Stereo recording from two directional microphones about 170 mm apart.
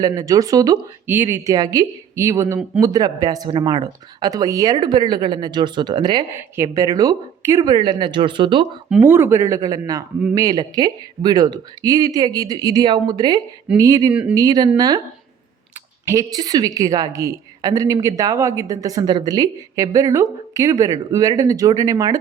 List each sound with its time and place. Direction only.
0.0 s a woman's voice: 20° right (ahead or behind)
9.0 s a woman's voice: 15° right (ahead or behind)
14.1 s speech: 5° right (ahead or behind)
14.3 s a woman's voice: 20° right (ahead or behind)
16.0 s a woman's voice: 20° right (ahead or behind)